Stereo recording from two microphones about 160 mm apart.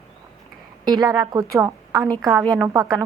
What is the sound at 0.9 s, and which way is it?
A woman's voice, 25° right (ahead or behind).